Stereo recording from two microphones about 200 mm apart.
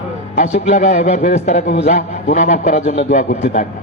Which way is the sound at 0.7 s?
40° left (ahead or behind).